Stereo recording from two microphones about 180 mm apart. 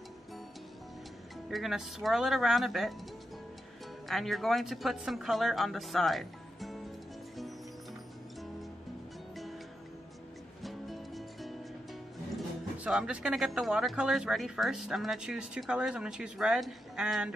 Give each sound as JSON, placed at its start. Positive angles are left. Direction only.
{"t": 1.5, "sound": "speech", "side_deg": 0}
{"t": 4.1, "sound": "speech", "side_deg": 0}
{"t": 10.6, "sound": "music", "side_deg": 0}
{"t": 12.4, "sound": "speech", "side_deg": -5}